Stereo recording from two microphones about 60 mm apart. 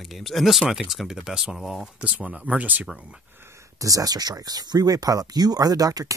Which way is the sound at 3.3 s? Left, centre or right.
Right.